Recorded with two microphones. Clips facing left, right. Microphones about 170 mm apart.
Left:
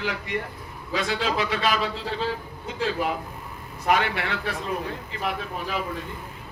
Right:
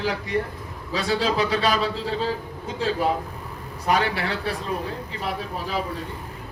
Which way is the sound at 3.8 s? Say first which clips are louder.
Right 1 dB; 35° right (ahead or behind).